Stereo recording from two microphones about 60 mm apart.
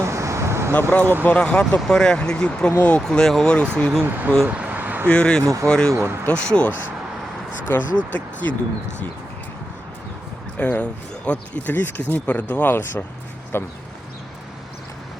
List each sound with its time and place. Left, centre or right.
0.0 s vehicle: right
0.8 s speech: left
3.0 s speech: centre
4.0 s speech: right
4.4 s a sound: right
5.0 s speech: centre
5.4 s speech: right
5.6 s speech: centre
5.9 s speech: right
6.5 s speech: centre
10.6 s speech: left
11.7 s speech: left